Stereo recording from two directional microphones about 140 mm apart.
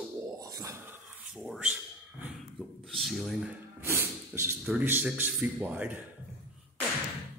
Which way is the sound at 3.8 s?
15° right (ahead or behind).